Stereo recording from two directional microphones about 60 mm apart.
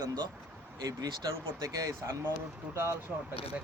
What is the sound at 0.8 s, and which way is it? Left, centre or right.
Speech, right.